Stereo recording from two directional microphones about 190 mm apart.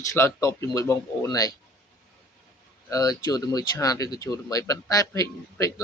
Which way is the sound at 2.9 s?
20° left (ahead or behind).